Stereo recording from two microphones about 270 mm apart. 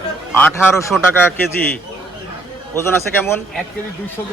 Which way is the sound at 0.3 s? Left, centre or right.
Centre.